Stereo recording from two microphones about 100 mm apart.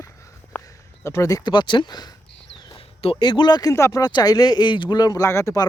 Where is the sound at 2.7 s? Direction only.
70° left (ahead or behind).